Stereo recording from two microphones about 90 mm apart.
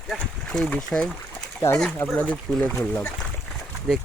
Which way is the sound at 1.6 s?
30° left (ahead or behind).